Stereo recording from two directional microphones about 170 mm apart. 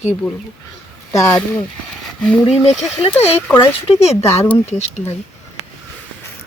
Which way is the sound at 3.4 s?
15° left (ahead or behind).